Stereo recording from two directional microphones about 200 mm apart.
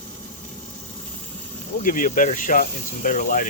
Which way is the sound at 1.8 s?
40° left (ahead or behind).